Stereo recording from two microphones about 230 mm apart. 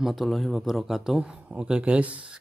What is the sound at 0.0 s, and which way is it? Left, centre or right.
A man's voice, centre.